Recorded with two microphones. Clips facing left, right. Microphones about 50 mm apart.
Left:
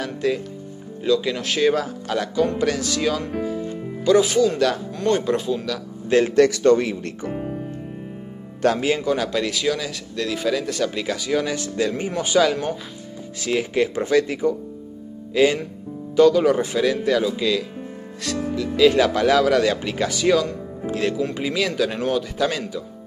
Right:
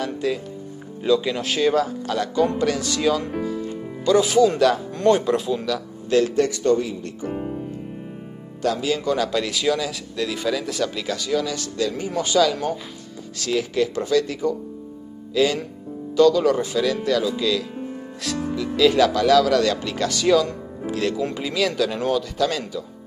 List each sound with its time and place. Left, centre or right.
0.0 s a man's voice: centre
6.0 s speech: left
6.3 s speech: left
8.6 s speech: left
9.0 s a man's voice: centre
10.9 s speech: centre
11.3 s speech: left
18.2 s a man's voice: centre
18.8 s speech: centre
19.1 s speech: left